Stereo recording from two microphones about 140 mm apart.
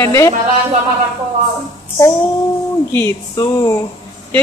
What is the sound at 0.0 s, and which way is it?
Speech, 20° left (ahead or behind).